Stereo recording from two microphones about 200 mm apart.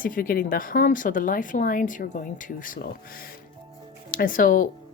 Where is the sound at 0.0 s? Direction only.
45° left (ahead or behind).